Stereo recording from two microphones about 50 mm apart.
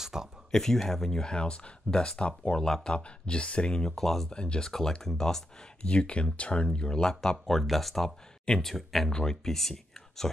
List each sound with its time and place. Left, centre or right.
0.0 s a sound: centre
0.5 s speech: centre
2.6 s speech: centre
2.9 s speech: left
3.9 s speech: centre
4.3 s speech: centre
5.8 s speech: left; by 10.3 s centre